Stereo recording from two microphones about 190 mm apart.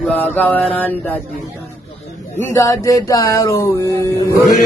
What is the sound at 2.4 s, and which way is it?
Speech, 15° left (ahead or behind).